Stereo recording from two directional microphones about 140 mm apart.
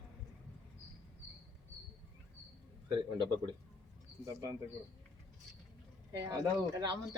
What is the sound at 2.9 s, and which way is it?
Speech, 35° right (ahead or behind).